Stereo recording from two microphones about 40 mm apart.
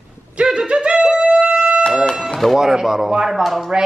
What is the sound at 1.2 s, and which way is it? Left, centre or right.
Music, right.